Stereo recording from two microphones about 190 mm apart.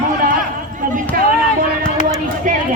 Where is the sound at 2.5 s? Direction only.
45° right (ahead or behind).